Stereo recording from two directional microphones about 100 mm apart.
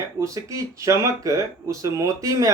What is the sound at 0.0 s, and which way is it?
Speech, 35° right (ahead or behind).